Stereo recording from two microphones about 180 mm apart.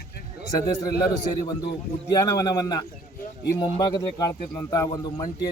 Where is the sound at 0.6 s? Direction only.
20° left (ahead or behind).